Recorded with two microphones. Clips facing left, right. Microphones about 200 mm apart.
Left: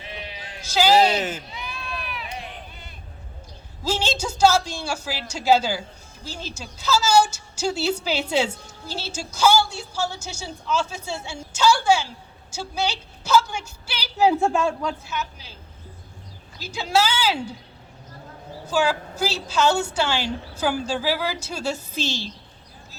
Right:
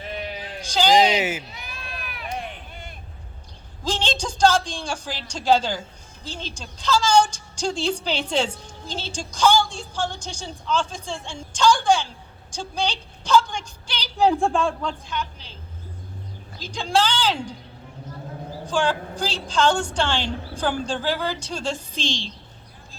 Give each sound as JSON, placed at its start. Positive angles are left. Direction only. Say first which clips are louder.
{"t": 0.0, "sound": "sheep", "louder": "right 6 dB", "side_deg": -45}
{"t": 0.6, "sound": "a woman's voice", "louder": "even", "side_deg": 5}
{"t": 1.1, "sound": "speech", "louder": "right 2 dB", "side_deg": -10}
{"t": 1.5, "sound": "a sound", "louder": "left 4 dB", "side_deg": -45}
{"t": 3.8, "sound": "a woman's voice", "louder": "left 1 dB", "side_deg": 10}
{"t": 16.6, "sound": "a woman's voice", "louder": "even", "side_deg": 5}
{"t": 18.6, "sound": "a woman's voice", "louder": "left 1 dB", "side_deg": 5}